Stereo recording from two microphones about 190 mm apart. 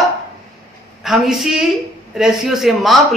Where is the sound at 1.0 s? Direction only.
Centre (ahead or behind).